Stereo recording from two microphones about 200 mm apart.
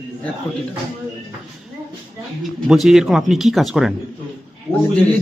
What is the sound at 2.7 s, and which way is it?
Speech, centre (ahead or behind).